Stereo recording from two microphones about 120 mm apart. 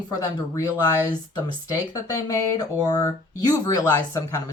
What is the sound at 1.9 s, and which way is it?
Speech, 30° left (ahead or behind).